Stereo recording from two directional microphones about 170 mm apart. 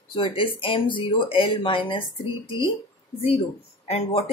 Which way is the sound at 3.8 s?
35° left (ahead or behind).